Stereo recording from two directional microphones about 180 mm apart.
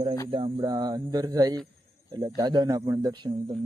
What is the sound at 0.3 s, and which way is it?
Speech, 25° right (ahead or behind).